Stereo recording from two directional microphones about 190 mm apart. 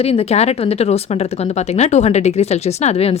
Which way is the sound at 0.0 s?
30° left (ahead or behind).